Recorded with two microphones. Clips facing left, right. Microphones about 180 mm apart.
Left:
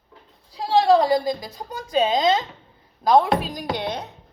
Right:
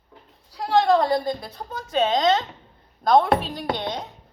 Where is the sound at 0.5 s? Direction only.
10° left (ahead or behind).